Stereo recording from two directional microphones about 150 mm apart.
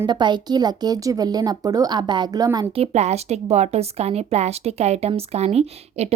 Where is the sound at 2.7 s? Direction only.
45° right (ahead or behind).